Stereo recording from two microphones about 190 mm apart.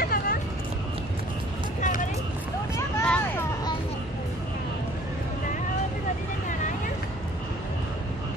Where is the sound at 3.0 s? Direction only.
5° left (ahead or behind).